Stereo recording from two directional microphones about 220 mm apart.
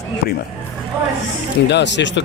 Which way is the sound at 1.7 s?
50° left (ahead or behind).